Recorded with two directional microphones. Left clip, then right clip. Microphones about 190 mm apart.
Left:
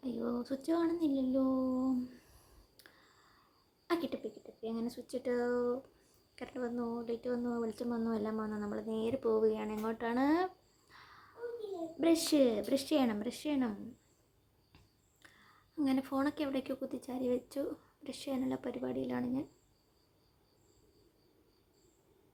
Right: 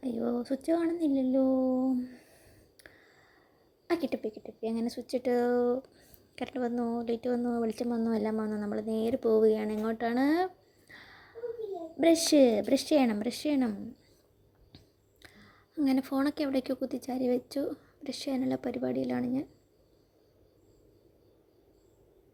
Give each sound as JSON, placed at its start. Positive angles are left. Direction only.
{"t": 0.0, "sound": "speech", "side_deg": -25}
{"t": 2.8, "sound": "clicking", "side_deg": -25}
{"t": 3.8, "sound": "speech", "side_deg": -25}
{"t": 15.2, "sound": "speech", "side_deg": -25}